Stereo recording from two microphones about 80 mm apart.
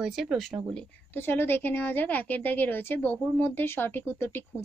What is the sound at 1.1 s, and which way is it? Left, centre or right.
A woman's voice, left.